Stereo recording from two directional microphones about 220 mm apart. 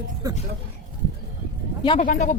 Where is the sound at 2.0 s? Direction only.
35° left (ahead or behind).